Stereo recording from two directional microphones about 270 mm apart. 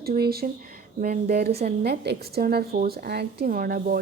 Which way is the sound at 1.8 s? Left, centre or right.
Right.